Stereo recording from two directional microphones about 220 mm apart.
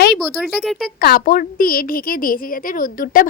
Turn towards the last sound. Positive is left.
turn(degrees=40)  # may be behind; listen again after turning